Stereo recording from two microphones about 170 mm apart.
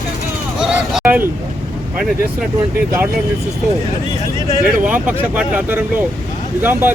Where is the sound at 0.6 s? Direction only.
5° right (ahead or behind).